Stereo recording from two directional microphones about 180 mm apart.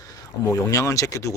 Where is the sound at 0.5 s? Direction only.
15° left (ahead or behind).